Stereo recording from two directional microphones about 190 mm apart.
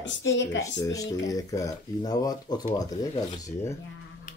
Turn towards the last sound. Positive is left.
turn(degrees=15)  # may be behind; listen again after turning